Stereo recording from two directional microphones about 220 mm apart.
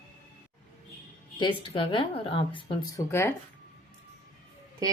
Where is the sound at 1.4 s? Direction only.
20° left (ahead or behind).